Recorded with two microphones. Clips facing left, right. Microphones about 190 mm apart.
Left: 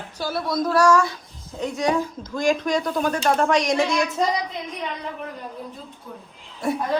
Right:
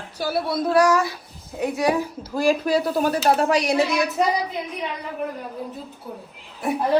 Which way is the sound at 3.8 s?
65° right (ahead or behind).